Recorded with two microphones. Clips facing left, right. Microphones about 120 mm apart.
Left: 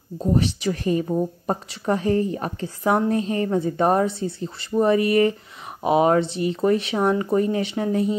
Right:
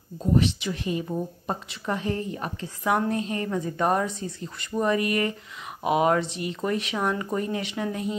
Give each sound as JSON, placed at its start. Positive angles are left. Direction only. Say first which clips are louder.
{"t": 0.2, "sound": "a woman's voice", "louder": "left 2 dB", "side_deg": 35}